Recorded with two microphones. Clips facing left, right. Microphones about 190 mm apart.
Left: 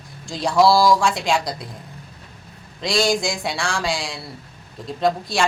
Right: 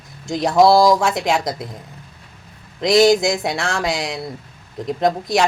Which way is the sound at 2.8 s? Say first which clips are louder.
Right 7 dB; 20° right (ahead or behind).